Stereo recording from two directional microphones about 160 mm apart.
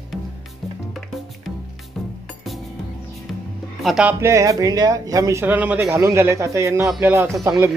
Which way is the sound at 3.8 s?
5° right (ahead or behind).